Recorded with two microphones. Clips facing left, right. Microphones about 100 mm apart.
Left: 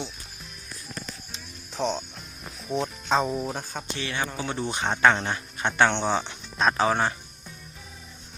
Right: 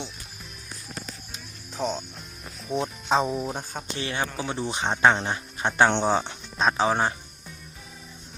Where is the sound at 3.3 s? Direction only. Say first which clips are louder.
Even; centre (ahead or behind).